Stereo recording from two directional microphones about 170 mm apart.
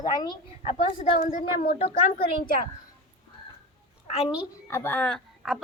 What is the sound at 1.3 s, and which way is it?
Speech, 55° left (ahead or behind).